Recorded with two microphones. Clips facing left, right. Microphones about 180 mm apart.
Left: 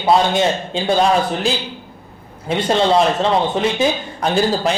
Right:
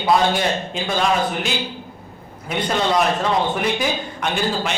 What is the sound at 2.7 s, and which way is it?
A man's voice, 30° left (ahead or behind).